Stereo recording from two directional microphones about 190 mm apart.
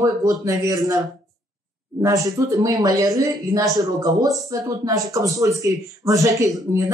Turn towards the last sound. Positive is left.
turn(degrees=-15)  # may be behind; listen again after turning